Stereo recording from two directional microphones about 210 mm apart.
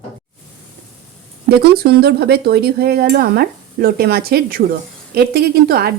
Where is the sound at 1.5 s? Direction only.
50° right (ahead or behind).